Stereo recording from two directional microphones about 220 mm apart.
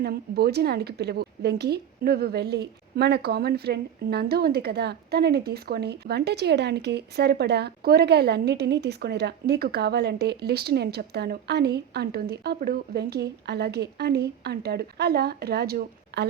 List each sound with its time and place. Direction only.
0.0 s a woman's voice: 45° right (ahead or behind)